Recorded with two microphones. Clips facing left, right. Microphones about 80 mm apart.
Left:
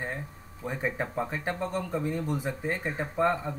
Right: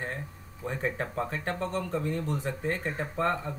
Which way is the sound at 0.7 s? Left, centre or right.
Centre.